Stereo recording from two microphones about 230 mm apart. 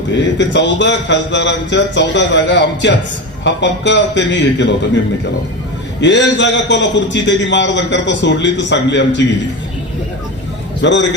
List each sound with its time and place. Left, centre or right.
0.2 s a man's voice: left
6.0 s a man's voice: left
10.8 s a man's voice: left